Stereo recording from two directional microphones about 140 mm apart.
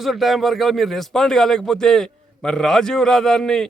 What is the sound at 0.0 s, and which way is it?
A man's voice, centre (ahead or behind).